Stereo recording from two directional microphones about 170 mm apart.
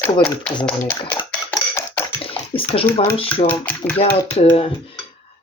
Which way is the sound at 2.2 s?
35° left (ahead or behind).